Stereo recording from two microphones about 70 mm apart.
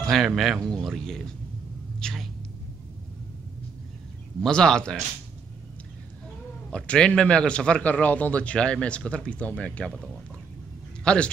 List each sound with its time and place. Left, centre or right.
0.0 s speech: centre
2.0 s a sound: centre
4.4 s a man's voice: centre
6.7 s a man's voice: centre
11.1 s a man's voice: centre